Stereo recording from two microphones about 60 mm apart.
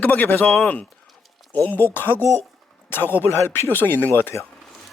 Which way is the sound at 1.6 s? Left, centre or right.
Left.